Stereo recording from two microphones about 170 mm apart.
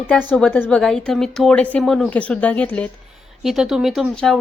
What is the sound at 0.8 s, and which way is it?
Speech, centre (ahead or behind).